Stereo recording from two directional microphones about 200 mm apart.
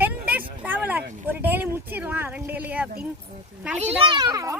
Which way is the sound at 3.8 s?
30° right (ahead or behind).